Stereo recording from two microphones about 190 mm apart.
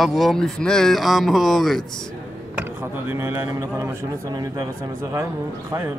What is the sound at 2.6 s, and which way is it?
Speech, 10° right (ahead or behind).